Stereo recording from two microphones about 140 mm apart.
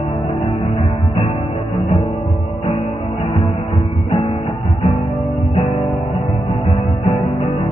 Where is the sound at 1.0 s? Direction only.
40° left (ahead or behind).